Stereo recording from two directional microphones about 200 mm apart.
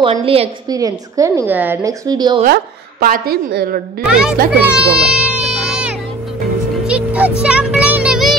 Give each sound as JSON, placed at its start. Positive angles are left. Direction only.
{"t": 0.1, "sound": "a woman's voice", "side_deg": -30}
{"t": 0.7, "sound": "a woman's voice", "side_deg": -15}
{"t": 2.4, "sound": "a woman's voice", "side_deg": -50}
{"t": 4.0, "sound": "a child's voice", "side_deg": -5}
{"t": 5.0, "sound": "baby cry", "side_deg": -5}
{"t": 5.6, "sound": "a sound", "side_deg": -5}
{"t": 6.9, "sound": "music", "side_deg": -5}